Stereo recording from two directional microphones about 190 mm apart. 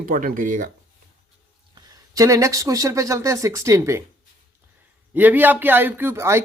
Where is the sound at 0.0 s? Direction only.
45° right (ahead or behind).